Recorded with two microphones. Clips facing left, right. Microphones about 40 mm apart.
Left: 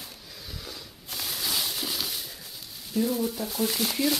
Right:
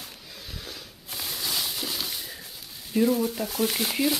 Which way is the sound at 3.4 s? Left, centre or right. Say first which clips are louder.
Right 2 dB; right.